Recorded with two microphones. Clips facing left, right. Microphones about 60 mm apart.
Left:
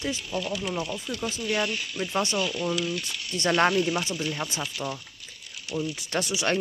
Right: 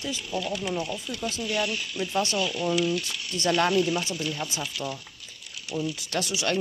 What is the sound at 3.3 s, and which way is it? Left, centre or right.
Speech, left.